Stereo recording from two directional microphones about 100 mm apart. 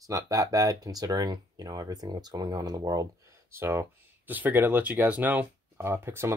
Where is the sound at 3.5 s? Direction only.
25° right (ahead or behind).